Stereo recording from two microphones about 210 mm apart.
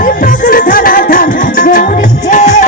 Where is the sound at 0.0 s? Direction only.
40° left (ahead or behind).